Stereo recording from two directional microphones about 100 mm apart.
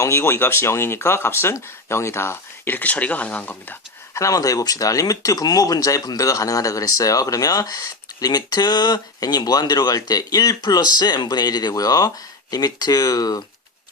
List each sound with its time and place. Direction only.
0.0 s speech: 25° left (ahead or behind)
4.2 s speech: 35° left (ahead or behind)